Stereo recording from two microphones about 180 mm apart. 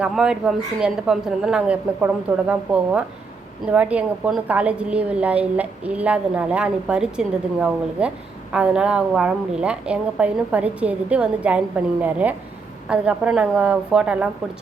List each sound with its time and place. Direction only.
0.0 s a woman's voice: 5° right (ahead or behind)
12.9 s a woman's voice: 5° right (ahead or behind)